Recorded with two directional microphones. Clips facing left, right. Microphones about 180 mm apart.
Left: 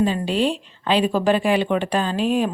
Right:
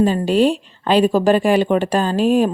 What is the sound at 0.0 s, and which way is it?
Speech, 45° right (ahead or behind).